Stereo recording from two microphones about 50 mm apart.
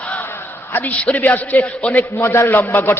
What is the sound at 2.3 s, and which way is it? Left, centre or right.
Speech, left.